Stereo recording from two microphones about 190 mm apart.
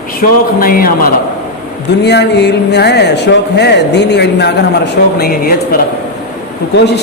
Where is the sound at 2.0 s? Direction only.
65° left (ahead or behind).